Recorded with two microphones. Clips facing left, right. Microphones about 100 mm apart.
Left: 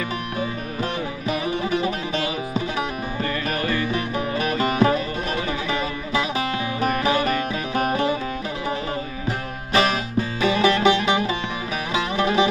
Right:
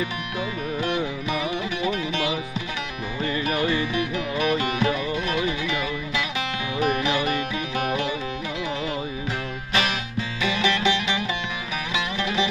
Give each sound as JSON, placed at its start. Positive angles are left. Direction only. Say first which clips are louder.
{"t": 0.3, "sound": "music", "louder": "right 2 dB", "side_deg": 35}
{"t": 9.7, "sound": "music", "louder": "left 6 dB", "side_deg": 40}